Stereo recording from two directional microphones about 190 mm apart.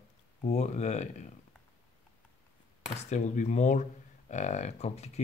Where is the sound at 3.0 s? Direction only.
35° left (ahead or behind).